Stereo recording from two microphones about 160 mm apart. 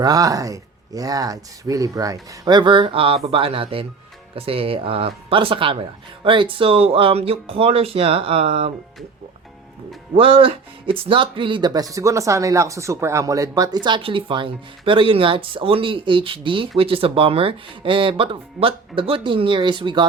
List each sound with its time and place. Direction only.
0.0 s speech: 20° right (ahead or behind)
10.2 s speech: 35° right (ahead or behind)